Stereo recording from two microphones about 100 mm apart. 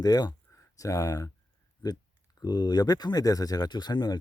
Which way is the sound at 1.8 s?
45° left (ahead or behind).